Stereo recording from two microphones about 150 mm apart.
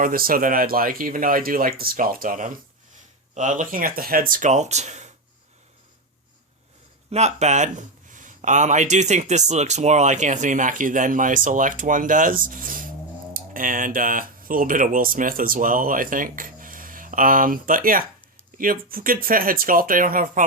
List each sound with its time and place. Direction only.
0.0 s speech: 70° right (ahead or behind); by 5.1 s 50° right (ahead or behind)
7.1 s speech: 45° right (ahead or behind); by 20.4 s 65° right (ahead or behind)